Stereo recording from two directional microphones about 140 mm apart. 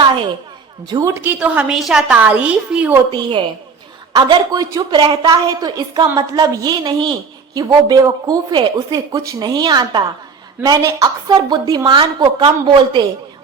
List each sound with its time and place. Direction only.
0.9 s speech: 25° right (ahead or behind)
1.1 s a woman's voice: 15° right (ahead or behind)
3.1 s a woman's voice: 35° right (ahead or behind)